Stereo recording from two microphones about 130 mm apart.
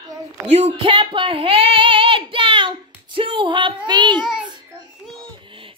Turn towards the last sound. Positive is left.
turn(degrees=-5)  # may be behind; listen again after turning